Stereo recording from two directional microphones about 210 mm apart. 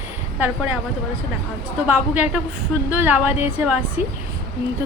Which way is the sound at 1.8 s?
10° right (ahead or behind).